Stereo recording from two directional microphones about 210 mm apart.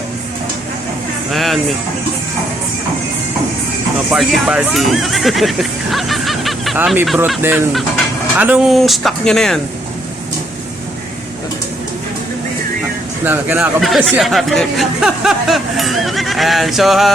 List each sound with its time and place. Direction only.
1.3 s a sound: centre (ahead or behind)
4.1 s speech: 5° right (ahead or behind)
13.2 s speech: 10° right (ahead or behind)